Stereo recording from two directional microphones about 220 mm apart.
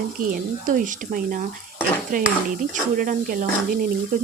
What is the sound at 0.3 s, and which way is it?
Speech, 40° right (ahead or behind).